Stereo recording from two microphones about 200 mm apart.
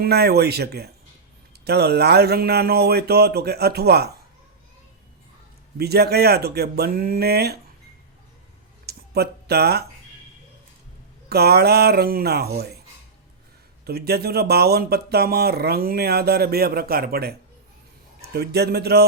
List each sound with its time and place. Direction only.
0.0 s speech: 55° right (ahead or behind)
5.7 s speech: 50° right (ahead or behind)
8.9 s a sound: 50° right (ahead or behind)
11.3 s speech: 50° right (ahead or behind)
13.8 s speech: 50° right (ahead or behind)